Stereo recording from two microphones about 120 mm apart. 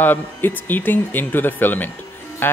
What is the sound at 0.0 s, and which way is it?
Speech, 15° left (ahead or behind).